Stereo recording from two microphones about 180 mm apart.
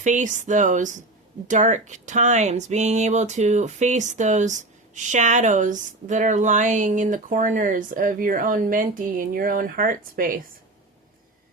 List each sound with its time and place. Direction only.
0.0 s speech: 45° right (ahead or behind)